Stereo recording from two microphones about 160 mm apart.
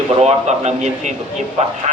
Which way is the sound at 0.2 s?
45° right (ahead or behind).